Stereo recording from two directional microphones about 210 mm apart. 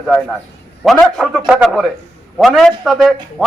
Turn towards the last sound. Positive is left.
turn(degrees=0)  # may be behind; listen again after turning